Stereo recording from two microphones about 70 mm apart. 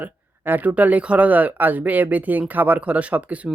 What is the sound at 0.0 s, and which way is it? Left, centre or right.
Speech, right.